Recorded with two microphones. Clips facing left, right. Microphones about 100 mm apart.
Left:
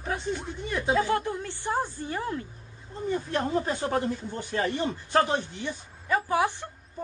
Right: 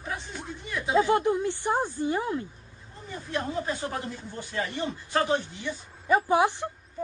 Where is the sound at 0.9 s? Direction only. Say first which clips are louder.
Right 5 dB; 20° right (ahead or behind).